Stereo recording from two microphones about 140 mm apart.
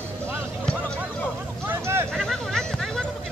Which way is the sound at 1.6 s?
15° right (ahead or behind).